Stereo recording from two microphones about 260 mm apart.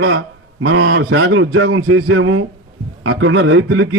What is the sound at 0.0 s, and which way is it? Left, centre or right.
A man's voice, right.